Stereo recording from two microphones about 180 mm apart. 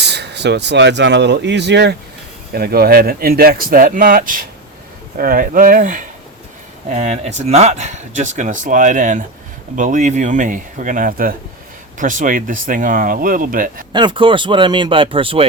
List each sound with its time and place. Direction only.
0.0 s speech: 70° right (ahead or behind)
2.5 s speech: 60° right (ahead or behind)
13.9 s speech: 25° right (ahead or behind)